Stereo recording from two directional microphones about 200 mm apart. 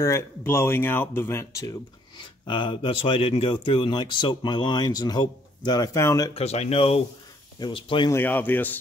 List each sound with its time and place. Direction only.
0.0 s speech: 15° left (ahead or behind)
6.3 s speech: 30° left (ahead or behind)
8.1 s speech: 10° left (ahead or behind)